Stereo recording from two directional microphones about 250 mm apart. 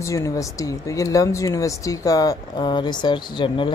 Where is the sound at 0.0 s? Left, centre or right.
Centre.